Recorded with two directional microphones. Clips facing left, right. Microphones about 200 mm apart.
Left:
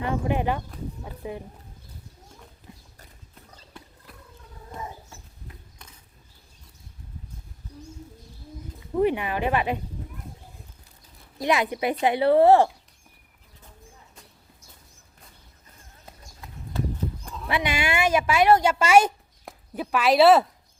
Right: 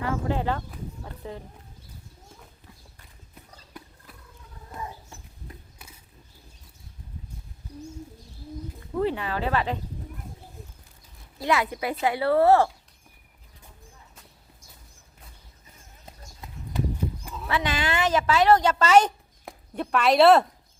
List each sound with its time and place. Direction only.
0.0 s speech: 20° left (ahead or behind)
5.8 s a sound: 5° right (ahead or behind)
9.0 s speech: 15° left (ahead or behind)
11.3 s speech: 15° left (ahead or behind)
17.2 s clip-clop: 5° right (ahead or behind)
17.5 s a woman's voice: 15° left (ahead or behind)